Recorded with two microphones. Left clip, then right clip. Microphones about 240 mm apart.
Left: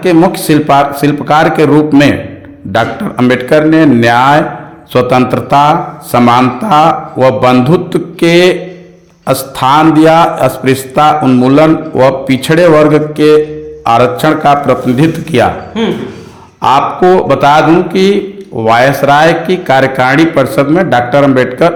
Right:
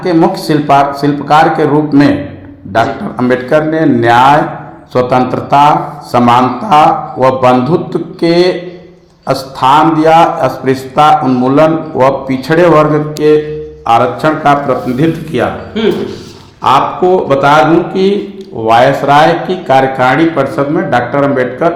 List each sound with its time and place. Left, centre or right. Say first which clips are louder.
0.0 s a man's voice: left 2 dB; left
16.6 s a man's voice: left 1 dB; left